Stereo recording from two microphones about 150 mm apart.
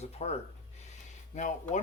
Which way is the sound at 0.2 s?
45° left (ahead or behind).